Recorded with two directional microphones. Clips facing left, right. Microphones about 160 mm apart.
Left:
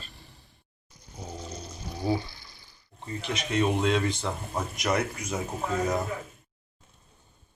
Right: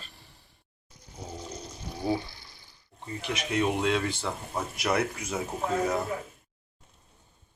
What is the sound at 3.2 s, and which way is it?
Speech, 10° right (ahead or behind).